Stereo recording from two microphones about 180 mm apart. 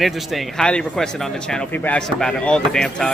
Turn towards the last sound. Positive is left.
turn(degrees=5)  # may be behind; listen again after turning